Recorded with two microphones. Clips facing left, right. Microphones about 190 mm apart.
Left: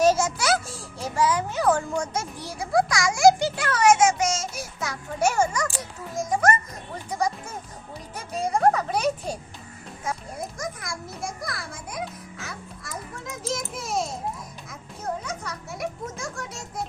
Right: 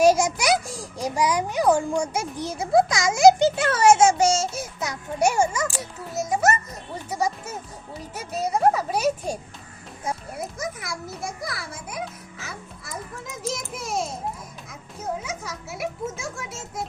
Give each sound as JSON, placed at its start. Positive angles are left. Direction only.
{"t": 0.0, "sound": "a sound", "side_deg": -15}
{"t": 6.1, "sound": "music", "side_deg": -5}
{"t": 10.3, "sound": "music", "side_deg": -5}